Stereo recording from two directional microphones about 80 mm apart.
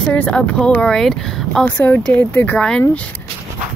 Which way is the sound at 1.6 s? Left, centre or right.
Left.